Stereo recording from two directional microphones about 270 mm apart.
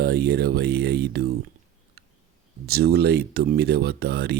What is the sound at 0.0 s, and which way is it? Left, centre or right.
Speech, right.